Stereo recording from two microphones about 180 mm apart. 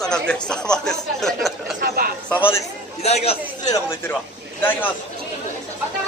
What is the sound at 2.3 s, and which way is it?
Speech, 10° left (ahead or behind).